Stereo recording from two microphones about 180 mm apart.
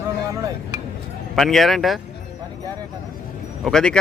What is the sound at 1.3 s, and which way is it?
Speech, centre (ahead or behind).